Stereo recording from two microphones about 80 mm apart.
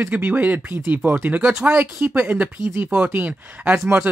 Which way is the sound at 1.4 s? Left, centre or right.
Centre.